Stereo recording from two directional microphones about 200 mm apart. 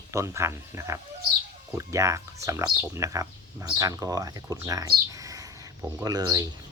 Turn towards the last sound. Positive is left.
turn(degrees=-20)  # may be behind; listen again after turning